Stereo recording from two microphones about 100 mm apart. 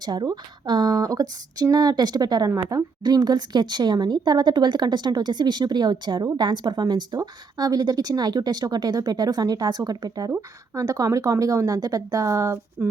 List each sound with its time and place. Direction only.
0.0 s a woman's voice: 45° right (ahead or behind)